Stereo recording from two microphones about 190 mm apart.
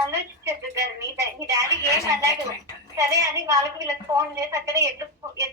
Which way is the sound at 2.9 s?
15° right (ahead or behind).